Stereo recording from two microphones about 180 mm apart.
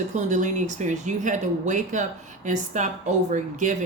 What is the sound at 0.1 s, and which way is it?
Speech, 40° right (ahead or behind).